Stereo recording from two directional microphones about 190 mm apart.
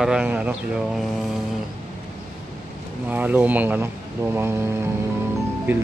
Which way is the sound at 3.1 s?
10° right (ahead or behind).